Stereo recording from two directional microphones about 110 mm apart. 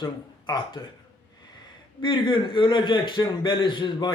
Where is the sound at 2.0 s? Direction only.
45° left (ahead or behind).